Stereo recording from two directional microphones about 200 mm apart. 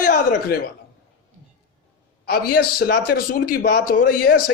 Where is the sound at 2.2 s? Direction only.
50° left (ahead or behind).